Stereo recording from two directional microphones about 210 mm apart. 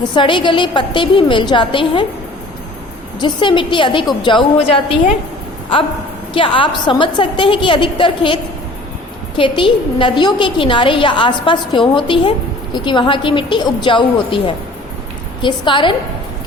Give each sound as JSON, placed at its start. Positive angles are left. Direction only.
{"t": 0.0, "sound": "a woman's voice", "side_deg": 20}
{"t": 3.2, "sound": "a woman's voice", "side_deg": 20}
{"t": 6.3, "sound": "a woman's voice", "side_deg": 25}
{"t": 9.4, "sound": "a woman's voice", "side_deg": 25}